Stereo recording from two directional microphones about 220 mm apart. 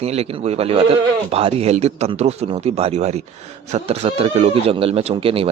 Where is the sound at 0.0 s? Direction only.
30° right (ahead or behind).